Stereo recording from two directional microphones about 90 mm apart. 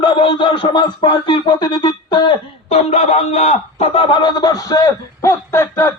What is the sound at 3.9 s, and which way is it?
Speech, 70° left (ahead or behind).